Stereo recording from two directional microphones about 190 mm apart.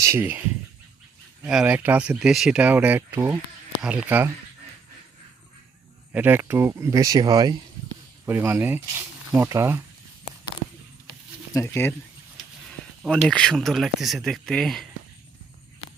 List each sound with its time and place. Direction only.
0.0 s speech: 10° right (ahead or behind)
6.1 s speech: 10° right (ahead or behind)
11.5 s speech: 10° left (ahead or behind)
13.2 s speech: 5° left (ahead or behind)